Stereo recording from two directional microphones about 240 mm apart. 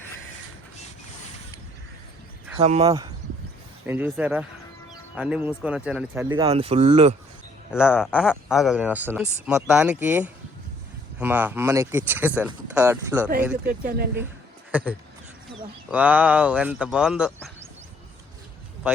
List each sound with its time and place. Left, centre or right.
2.6 s speech: right
6.5 s speech: right
7.8 s speech: centre
13.7 s speech: right
14.7 s speech: centre